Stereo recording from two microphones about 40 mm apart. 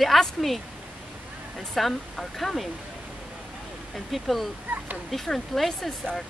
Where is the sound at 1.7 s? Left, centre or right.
Centre.